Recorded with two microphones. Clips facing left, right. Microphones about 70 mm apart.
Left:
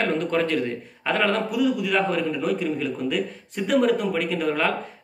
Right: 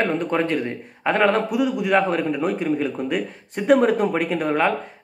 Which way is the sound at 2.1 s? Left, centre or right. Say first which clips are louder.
Right 2 dB; right.